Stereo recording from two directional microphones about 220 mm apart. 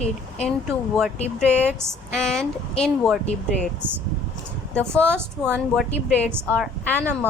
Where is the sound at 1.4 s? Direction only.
5° left (ahead or behind).